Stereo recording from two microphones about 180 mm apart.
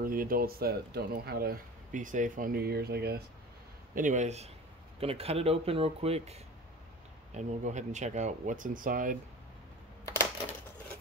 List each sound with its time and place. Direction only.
0.0 s speech: 50° right (ahead or behind)
3.9 s speech: 45° right (ahead or behind)